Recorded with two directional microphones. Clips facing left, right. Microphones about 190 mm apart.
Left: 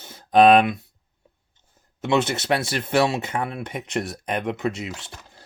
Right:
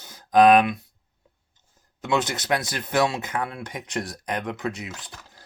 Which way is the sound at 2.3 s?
25° left (ahead or behind).